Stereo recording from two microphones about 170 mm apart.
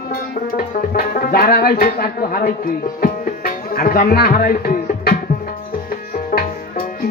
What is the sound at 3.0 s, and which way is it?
Music, 55° left (ahead or behind).